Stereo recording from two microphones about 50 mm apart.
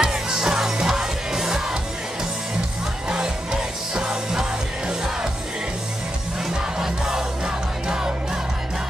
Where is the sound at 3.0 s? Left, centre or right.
Centre.